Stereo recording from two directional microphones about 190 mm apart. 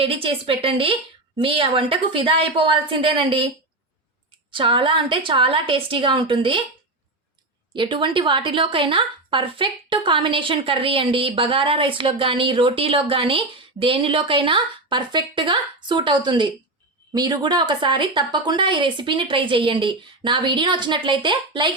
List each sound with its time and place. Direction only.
0.0 s a woman's voice: 30° right (ahead or behind)
4.5 s a woman's voice: 25° right (ahead or behind)
7.8 s a woman's voice: 25° right (ahead or behind)